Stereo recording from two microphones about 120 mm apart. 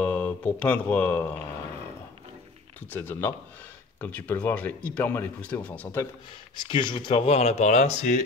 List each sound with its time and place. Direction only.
0.0 s speech: 10° left (ahead or behind)
2.9 s speech: 15° left (ahead or behind)
6.6 s speech: 40° left (ahead or behind); by 8.2 s 75° left (ahead or behind)